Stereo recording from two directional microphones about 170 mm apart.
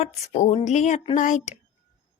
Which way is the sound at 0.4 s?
40° left (ahead or behind).